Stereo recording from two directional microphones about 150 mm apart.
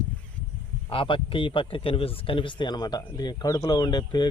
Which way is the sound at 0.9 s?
35° left (ahead or behind).